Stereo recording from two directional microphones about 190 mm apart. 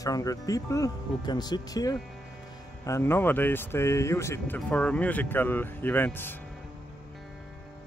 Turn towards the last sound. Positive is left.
turn(degrees=10)  # may be behind; listen again after turning